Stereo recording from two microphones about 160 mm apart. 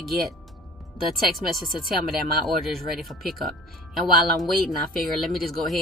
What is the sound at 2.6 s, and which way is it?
Speech, centre (ahead or behind).